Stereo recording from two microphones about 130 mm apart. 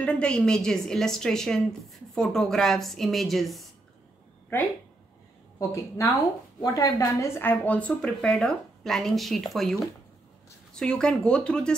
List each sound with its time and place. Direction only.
0.0 s a woman's voice: 10° left (ahead or behind)
5.6 s a woman's voice: 25° left (ahead or behind); by 11.7 s 5° left (ahead or behind)